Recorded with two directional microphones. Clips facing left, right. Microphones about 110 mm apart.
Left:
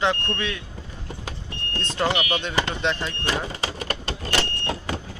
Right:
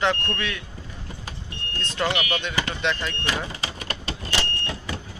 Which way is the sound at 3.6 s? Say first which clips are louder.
Left 4 dB; 40° left (ahead or behind).